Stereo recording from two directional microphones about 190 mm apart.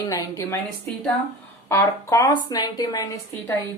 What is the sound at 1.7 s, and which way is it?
A woman's voice, 15° left (ahead or behind).